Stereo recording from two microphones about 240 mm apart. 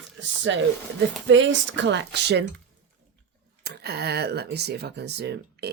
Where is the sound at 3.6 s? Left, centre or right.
Right.